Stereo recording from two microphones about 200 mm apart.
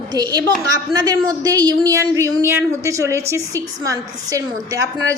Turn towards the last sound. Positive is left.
turn(degrees=-15)  # may be behind; listen again after turning